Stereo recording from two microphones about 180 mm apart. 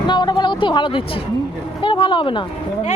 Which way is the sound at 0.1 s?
25° left (ahead or behind).